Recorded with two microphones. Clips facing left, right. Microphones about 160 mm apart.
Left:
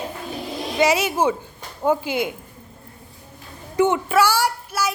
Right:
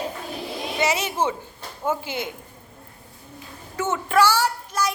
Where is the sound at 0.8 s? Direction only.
10° left (ahead or behind).